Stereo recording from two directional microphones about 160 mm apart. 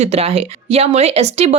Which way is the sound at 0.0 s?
40° right (ahead or behind).